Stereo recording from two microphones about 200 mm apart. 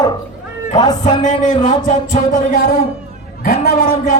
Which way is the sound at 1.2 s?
40° left (ahead or behind).